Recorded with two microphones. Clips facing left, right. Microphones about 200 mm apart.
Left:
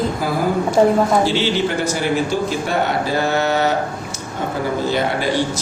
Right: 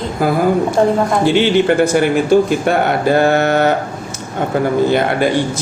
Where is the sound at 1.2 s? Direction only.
55° right (ahead or behind).